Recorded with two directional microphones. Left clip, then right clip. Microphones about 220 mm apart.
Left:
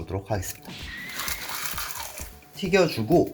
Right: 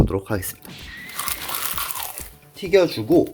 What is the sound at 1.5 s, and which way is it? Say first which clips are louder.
Music: right 4 dB; 40° right (ahead or behind).